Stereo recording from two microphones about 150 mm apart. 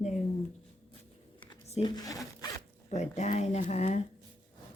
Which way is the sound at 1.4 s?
45° left (ahead or behind).